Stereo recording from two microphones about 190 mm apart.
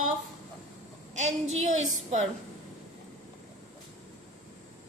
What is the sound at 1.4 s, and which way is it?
Speech, 90° right.